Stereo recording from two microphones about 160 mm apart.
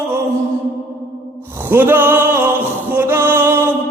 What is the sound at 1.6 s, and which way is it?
Music, 15° right (ahead or behind).